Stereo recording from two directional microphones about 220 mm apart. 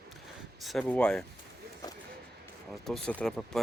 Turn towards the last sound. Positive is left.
turn(degrees=0)  # may be behind; listen again after turning